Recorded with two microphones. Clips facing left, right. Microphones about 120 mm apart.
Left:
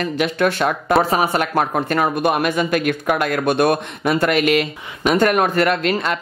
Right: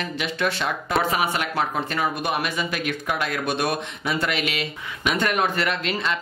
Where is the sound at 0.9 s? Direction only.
35° left (ahead or behind).